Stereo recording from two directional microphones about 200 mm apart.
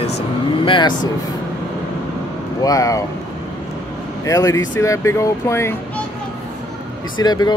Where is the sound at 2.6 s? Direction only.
15° left (ahead or behind).